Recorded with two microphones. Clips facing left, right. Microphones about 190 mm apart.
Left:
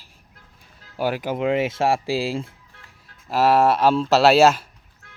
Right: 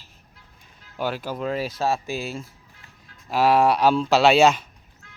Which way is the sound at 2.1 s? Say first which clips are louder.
Left 6 dB; 90° left.